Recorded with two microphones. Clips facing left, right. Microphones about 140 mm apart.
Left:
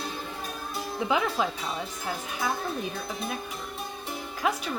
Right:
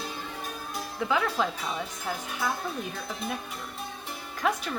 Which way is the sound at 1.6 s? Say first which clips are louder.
Even; centre (ahead or behind).